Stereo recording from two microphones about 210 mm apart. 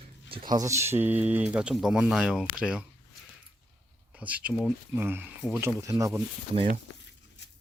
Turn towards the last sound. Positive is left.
turn(degrees=-40)  # may be behind; listen again after turning